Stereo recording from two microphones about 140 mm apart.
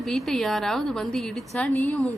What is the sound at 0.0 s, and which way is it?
A woman's voice, centre (ahead or behind).